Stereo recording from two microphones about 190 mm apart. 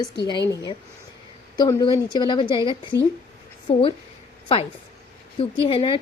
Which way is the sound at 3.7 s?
25° left (ahead or behind).